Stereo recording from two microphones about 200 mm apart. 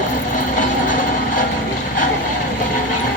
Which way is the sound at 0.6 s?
40° left (ahead or behind).